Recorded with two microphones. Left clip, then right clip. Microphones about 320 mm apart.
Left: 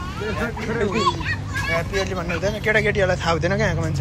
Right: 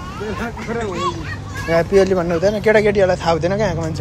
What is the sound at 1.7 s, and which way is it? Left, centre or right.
Speech, right.